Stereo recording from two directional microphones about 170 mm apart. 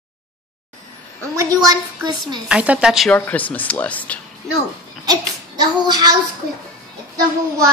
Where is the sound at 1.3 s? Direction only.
20° right (ahead or behind).